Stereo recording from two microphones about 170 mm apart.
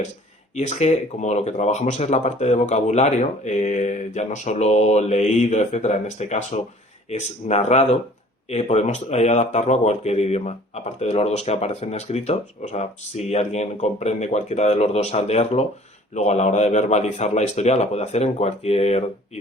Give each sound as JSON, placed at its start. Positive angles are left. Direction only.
{"t": 0.5, "sound": "speech", "side_deg": 45}